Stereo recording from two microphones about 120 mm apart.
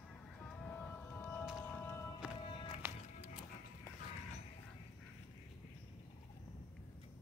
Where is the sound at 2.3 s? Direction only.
45° left (ahead or behind).